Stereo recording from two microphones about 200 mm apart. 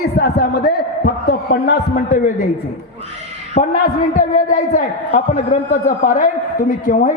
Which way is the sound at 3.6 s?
40° left (ahead or behind).